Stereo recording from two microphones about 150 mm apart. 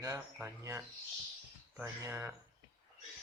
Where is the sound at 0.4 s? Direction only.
20° right (ahead or behind).